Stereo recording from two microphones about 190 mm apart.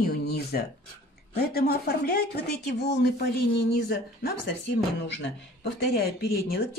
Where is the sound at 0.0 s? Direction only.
55° left (ahead or behind).